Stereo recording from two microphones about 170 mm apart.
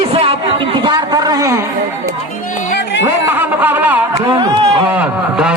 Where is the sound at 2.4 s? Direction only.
50° left (ahead or behind).